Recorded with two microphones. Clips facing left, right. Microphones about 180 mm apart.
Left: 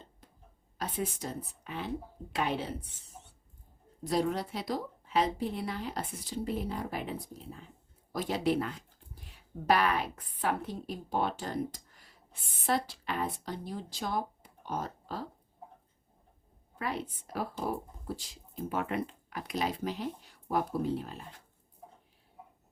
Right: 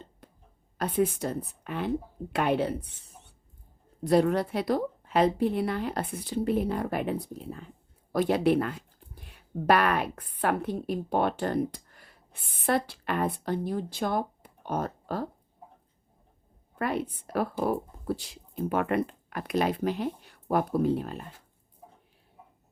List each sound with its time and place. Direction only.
0.2 s a sound: 60° right (ahead or behind)
0.8 s a woman's voice: 60° right (ahead or behind)
4.0 s a woman's voice: 60° right (ahead or behind)
16.7 s a woman's voice: 55° right (ahead or behind)